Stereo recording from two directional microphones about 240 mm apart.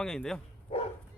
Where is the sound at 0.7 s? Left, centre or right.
Left.